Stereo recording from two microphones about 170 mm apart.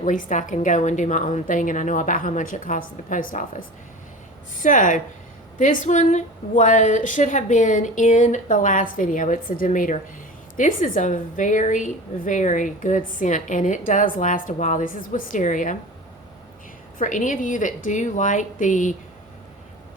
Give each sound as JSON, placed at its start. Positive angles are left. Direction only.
{"t": 0.0, "sound": "a woman's voice", "side_deg": 50}
{"t": 17.0, "sound": "a woman's voice", "side_deg": 50}